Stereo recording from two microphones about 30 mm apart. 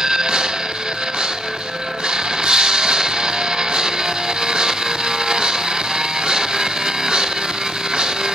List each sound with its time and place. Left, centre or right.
0.0 s a sound: centre
2.4 s music: right
4.5 s music: right